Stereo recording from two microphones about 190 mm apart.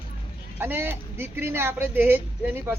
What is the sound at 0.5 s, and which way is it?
Speech, 10° right (ahead or behind).